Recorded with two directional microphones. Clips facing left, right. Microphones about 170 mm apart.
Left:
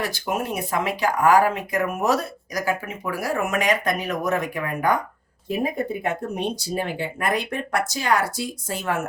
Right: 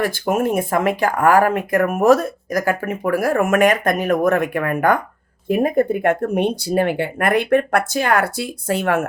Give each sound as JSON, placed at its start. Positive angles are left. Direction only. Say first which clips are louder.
{"t": 0.0, "sound": "speech", "louder": "right 7 dB", "side_deg": -50}